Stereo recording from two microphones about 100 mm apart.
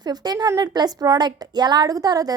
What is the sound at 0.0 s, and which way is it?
A woman's voice, 45° right (ahead or behind).